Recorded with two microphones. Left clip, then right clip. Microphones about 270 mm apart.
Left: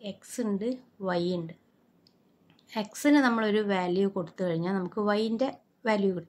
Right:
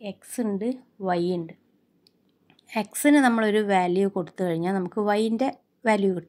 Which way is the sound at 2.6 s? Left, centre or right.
Right.